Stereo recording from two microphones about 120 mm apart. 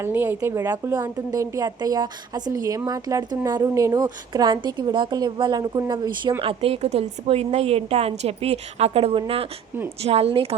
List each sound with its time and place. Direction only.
0.0 s a woman's voice: 20° right (ahead or behind)
6.4 s a woman's voice: 50° right (ahead or behind)